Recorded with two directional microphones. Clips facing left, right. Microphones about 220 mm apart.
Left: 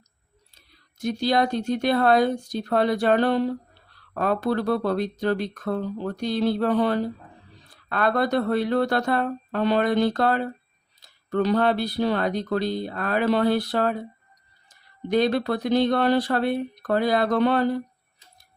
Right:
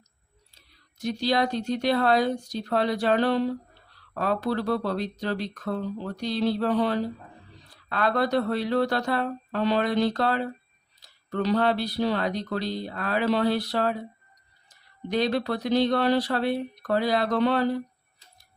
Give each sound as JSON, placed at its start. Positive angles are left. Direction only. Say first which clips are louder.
{"t": 0.9, "sound": "speech", "louder": "left 2 dB", "side_deg": 50}
{"t": 15.1, "sound": "speech", "louder": "left 4 dB", "side_deg": 50}